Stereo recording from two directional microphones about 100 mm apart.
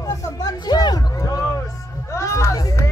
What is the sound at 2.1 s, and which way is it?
Music, 30° left (ahead or behind).